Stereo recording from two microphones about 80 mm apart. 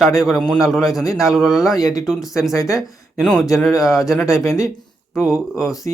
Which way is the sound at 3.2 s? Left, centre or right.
Centre.